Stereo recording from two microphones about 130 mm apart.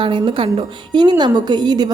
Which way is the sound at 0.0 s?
40° right (ahead or behind).